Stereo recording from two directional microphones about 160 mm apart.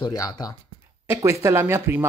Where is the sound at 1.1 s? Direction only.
20° right (ahead or behind).